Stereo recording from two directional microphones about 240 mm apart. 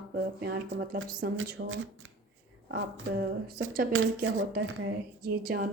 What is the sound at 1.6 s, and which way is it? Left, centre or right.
Speech, right.